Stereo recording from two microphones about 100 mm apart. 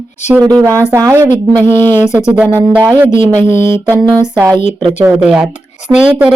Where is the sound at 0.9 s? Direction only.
35° right (ahead or behind).